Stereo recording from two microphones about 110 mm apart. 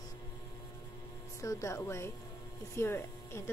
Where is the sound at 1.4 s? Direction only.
30° left (ahead or behind).